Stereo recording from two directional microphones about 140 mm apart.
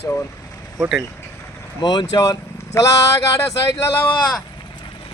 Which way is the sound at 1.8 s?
30° left (ahead or behind).